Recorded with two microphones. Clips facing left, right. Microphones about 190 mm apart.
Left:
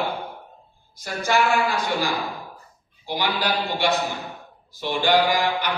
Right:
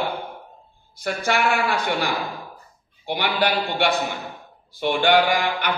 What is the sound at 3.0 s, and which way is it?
A man's voice, 65° right (ahead or behind).